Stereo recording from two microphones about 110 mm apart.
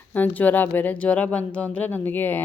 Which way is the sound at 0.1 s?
15° left (ahead or behind).